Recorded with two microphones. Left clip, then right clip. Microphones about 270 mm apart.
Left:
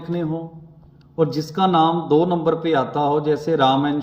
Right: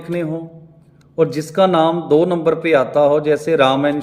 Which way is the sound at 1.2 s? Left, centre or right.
Centre.